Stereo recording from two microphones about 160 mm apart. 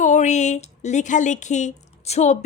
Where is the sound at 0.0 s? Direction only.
50° left (ahead or behind).